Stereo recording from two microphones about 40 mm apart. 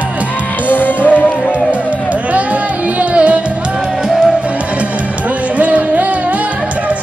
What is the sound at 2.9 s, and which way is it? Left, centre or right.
Music, right.